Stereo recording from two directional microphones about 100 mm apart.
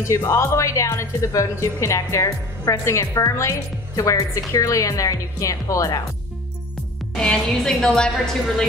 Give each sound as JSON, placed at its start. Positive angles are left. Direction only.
{"t": 0.1, "sound": "a woman's voice", "side_deg": 30}
{"t": 7.2, "sound": "a woman's voice", "side_deg": 5}